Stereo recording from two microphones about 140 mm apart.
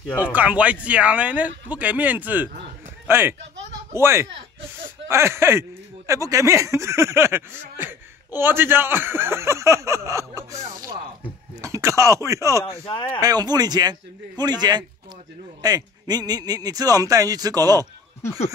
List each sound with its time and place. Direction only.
0.2 s speech: 10° right (ahead or behind)